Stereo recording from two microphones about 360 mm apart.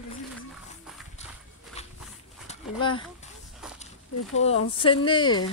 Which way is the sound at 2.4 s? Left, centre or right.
Centre.